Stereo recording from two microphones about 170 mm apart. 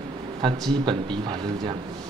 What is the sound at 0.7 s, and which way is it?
A man's voice, 30° right (ahead or behind).